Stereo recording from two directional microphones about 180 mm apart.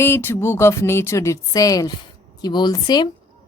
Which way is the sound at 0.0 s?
10° left (ahead or behind).